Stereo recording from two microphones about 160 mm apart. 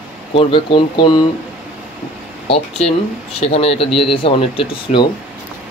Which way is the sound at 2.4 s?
40° left (ahead or behind).